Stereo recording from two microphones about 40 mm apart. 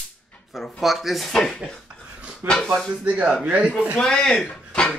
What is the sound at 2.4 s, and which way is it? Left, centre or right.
Speech, right.